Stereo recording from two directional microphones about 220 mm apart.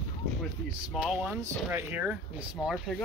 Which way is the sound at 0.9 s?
5° right (ahead or behind).